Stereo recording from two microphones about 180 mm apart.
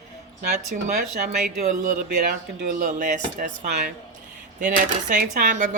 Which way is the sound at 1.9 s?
55° right (ahead or behind).